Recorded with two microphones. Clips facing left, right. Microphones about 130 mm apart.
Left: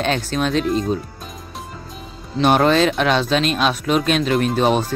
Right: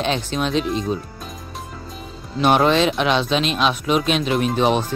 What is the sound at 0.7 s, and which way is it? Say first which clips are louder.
Speech: left 3 dB; centre (ahead or behind).